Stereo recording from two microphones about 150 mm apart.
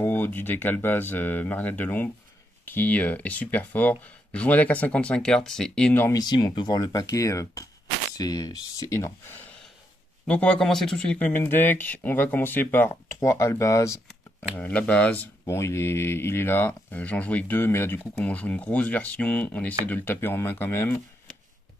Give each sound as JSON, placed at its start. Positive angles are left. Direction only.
{"t": 0.0, "sound": "speech", "side_deg": 15}
{"t": 6.0, "sound": "speech", "side_deg": 25}
{"t": 14.5, "sound": "speech", "side_deg": 10}
{"t": 15.4, "sound": "speech", "side_deg": 15}